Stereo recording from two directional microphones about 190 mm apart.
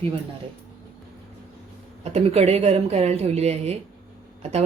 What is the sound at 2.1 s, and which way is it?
Speech, 35° right (ahead or behind).